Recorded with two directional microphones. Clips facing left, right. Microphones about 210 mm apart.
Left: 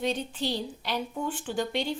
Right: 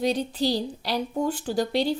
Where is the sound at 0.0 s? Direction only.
35° right (ahead or behind).